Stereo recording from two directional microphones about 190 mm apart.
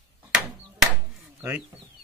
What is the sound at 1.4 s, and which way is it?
Speech, 10° right (ahead or behind).